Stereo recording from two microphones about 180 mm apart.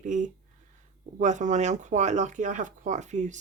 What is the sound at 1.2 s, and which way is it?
Speech, 40° right (ahead or behind).